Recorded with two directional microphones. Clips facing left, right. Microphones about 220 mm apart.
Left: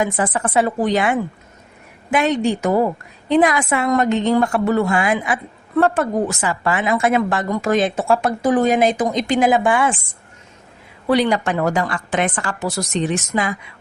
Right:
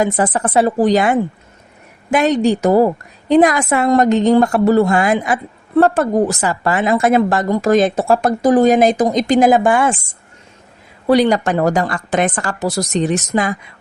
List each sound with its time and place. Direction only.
0.0 s a woman's voice: 35° right (ahead or behind)
11.0 s a woman's voice: 40° right (ahead or behind)